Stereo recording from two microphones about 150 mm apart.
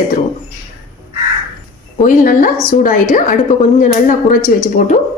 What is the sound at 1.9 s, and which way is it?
A woman's voice, 60° left (ahead or behind).